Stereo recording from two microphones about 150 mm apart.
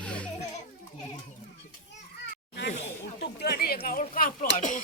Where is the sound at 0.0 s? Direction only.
10° left (ahead or behind).